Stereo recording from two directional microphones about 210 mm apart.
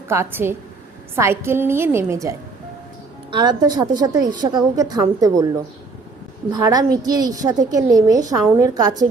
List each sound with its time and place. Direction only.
0.1 s a woman's voice: 10° right (ahead or behind)
3.3 s a woman's voice: 20° right (ahead or behind)
6.5 s a woman's voice: 15° right (ahead or behind)